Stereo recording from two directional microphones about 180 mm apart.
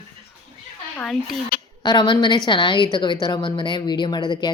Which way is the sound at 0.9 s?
5° left (ahead or behind).